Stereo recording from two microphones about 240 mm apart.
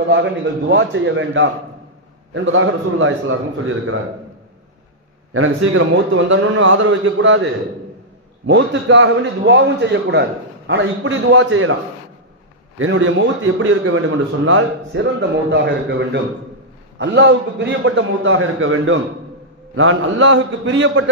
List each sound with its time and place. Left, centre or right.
0.1 s a man's voice: right
5.3 s a man's voice: right
8.5 s a man's voice: right
12.7 s a man's voice: right